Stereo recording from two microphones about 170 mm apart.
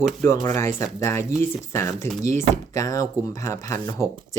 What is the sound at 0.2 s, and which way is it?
Speech, 15° left (ahead or behind).